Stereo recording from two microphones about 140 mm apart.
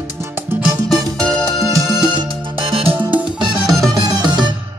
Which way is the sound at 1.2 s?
25° right (ahead or behind).